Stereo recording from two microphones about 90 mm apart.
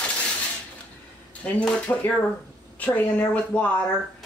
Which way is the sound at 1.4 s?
15° left (ahead or behind).